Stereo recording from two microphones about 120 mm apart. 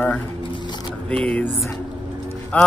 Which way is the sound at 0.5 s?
40° left (ahead or behind).